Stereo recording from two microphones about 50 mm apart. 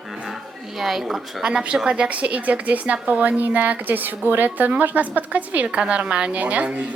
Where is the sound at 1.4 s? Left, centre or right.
Centre.